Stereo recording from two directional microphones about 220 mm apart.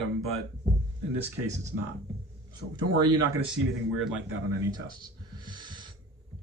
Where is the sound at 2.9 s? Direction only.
15° right (ahead or behind).